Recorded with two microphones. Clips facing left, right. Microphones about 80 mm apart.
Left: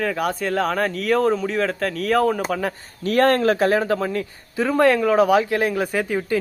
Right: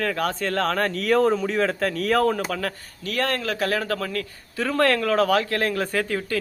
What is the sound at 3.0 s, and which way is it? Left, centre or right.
Speech, left.